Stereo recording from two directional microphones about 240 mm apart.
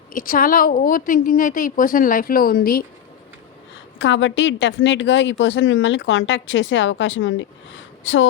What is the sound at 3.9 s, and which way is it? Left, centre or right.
A woman's voice, left.